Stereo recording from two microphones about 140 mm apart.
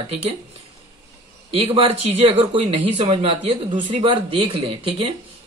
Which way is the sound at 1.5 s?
45° right (ahead or behind).